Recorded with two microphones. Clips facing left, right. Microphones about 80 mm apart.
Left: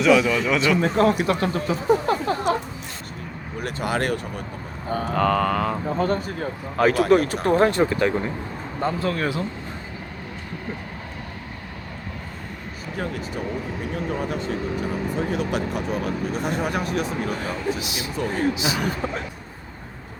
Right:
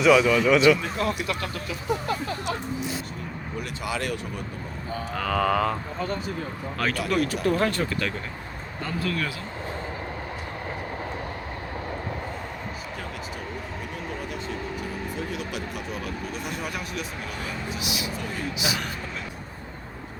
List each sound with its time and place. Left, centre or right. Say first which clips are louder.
0.0 s a man's voice: even; centre
0.8 s speech: left 8 dB; left
3.6 s speech: left 6 dB; left
5.1 s a man's voice: left 3 dB; centre
6.0 s speech: left 6 dB; left
6.7 s speech: left 9 dB; centre
7.1 s speech: left 6 dB; left
15.3 s speech: left 8 dB; left
16.0 s vehicle: left 7 dB; left
17.7 s speech: left 3 dB; left